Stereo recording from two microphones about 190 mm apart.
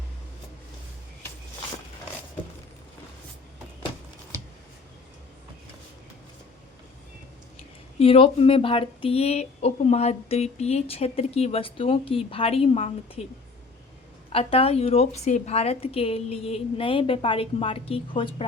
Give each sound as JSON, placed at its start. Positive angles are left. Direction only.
{"t": 7.9, "sound": "speech", "side_deg": 30}
{"t": 14.3, "sound": "speech", "side_deg": 30}